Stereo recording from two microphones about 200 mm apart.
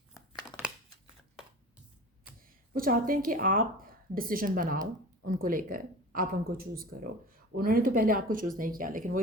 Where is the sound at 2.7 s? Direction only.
45° right (ahead or behind).